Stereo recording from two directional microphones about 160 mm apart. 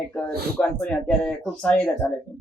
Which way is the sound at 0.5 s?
5° left (ahead or behind).